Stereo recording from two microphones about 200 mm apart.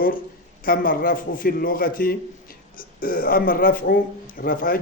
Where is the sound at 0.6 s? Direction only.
45° left (ahead or behind).